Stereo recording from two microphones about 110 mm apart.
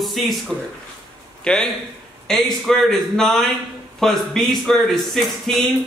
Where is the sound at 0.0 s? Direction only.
Centre (ahead or behind).